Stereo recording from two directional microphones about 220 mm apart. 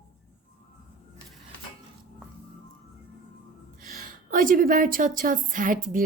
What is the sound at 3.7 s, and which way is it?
A woman's voice, 40° right (ahead or behind).